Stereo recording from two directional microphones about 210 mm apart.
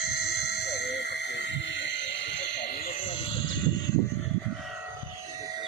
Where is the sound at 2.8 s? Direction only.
30° left (ahead or behind).